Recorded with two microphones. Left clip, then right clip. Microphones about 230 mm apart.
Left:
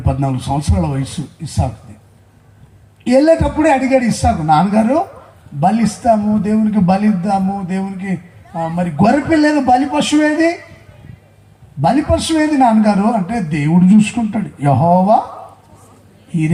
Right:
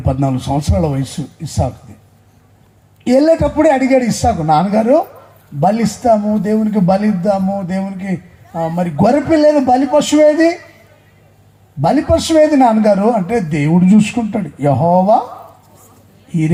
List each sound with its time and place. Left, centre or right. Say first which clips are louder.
0.0 s a man's voice: right 2 dB; right
3.1 s a man's voice: even; right
11.8 s a man's voice: right 1 dB; right